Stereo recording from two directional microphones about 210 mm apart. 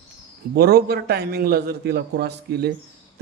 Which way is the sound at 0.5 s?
50° right (ahead or behind).